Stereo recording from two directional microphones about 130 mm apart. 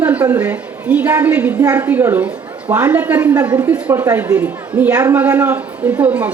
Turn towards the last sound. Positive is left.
turn(degrees=-10)  # may be behind; listen again after turning